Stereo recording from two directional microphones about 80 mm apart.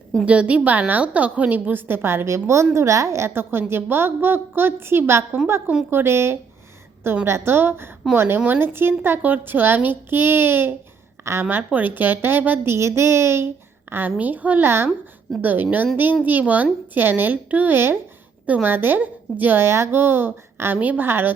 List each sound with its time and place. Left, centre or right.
0.3 s a woman's voice: centre